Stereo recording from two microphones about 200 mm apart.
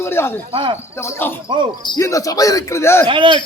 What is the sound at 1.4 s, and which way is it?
Speech, 25° right (ahead or behind).